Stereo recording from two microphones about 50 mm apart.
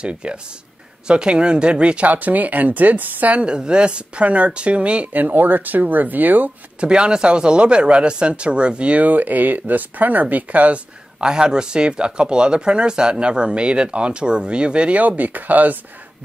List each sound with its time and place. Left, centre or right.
0.0 s speech: right
2.0 s speech: right
3.4 s speech: centre
5.1 s speech: right
6.8 s speech: centre
11.1 s speech: centre
15.0 s speech: right